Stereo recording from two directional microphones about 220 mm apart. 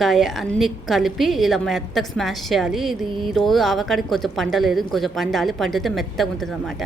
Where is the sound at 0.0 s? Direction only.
Centre (ahead or behind).